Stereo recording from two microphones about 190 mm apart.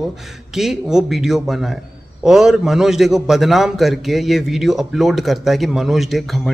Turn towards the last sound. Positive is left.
turn(degrees=0)  # may be behind; listen again after turning